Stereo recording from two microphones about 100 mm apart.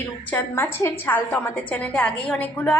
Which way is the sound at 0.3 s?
20° left (ahead or behind).